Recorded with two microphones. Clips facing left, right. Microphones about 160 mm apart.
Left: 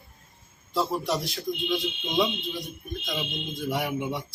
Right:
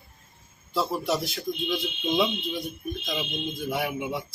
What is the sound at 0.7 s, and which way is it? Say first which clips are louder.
Music: even; centre (ahead or behind).